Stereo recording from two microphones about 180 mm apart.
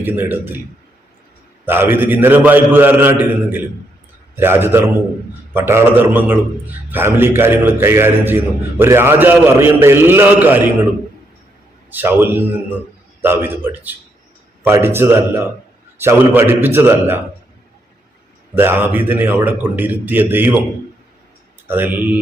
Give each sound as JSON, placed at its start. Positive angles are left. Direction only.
{"t": 0.0, "sound": "a man's voice", "side_deg": -10}
{"t": 1.6, "sound": "a man's voice", "side_deg": -10}
{"t": 11.9, "sound": "a man's voice", "side_deg": -10}
{"t": 18.5, "sound": "a man's voice", "side_deg": -10}
{"t": 21.7, "sound": "a man's voice", "side_deg": -10}